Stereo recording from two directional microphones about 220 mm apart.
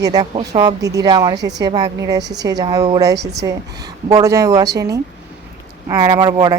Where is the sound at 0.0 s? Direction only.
20° right (ahead or behind).